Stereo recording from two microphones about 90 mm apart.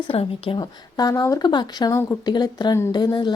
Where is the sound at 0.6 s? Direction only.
45° left (ahead or behind).